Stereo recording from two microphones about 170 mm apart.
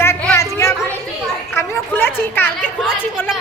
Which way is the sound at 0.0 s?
15° left (ahead or behind).